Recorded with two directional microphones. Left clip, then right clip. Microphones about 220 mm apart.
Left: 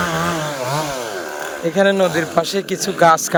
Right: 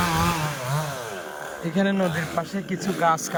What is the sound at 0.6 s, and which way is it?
Chainsaw, 40° left (ahead or behind).